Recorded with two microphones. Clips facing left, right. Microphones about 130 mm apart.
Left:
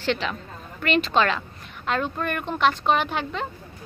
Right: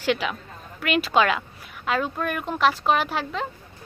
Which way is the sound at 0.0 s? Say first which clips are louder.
Right 1 dB; 10° right (ahead or behind).